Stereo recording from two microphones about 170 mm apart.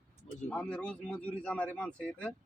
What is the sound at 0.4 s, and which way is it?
Speech, 5° left (ahead or behind).